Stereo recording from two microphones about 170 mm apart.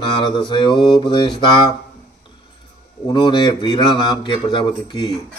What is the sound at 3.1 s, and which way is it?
Mantra, 25° left (ahead or behind).